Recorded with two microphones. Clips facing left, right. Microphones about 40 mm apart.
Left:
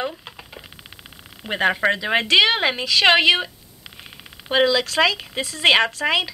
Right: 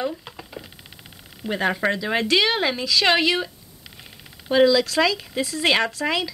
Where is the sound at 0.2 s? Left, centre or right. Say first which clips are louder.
Right 1 dB; centre.